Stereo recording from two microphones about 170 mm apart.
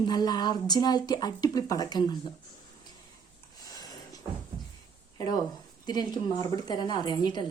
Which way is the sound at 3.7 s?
20° left (ahead or behind).